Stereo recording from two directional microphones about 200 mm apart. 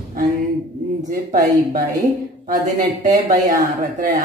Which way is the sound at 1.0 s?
40° right (ahead or behind).